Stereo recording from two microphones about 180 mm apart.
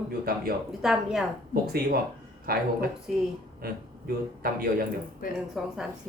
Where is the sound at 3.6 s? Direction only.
55° right (ahead or behind).